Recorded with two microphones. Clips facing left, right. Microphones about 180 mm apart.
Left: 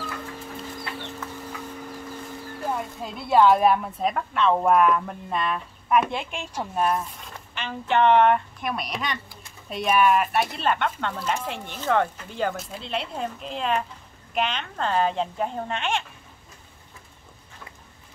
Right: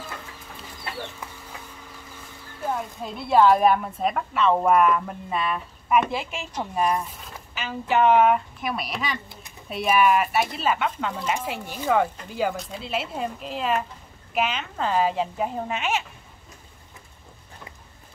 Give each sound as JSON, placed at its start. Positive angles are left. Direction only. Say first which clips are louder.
{"t": 2.6, "sound": "speech", "louder": "right 1 dB", "side_deg": 0}